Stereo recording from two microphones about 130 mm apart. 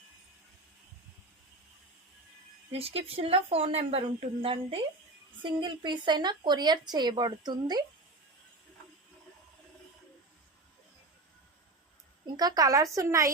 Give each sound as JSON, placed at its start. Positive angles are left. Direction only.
{"t": 2.7, "sound": "a woman's voice", "side_deg": -50}
{"t": 12.2, "sound": "a woman's voice", "side_deg": -30}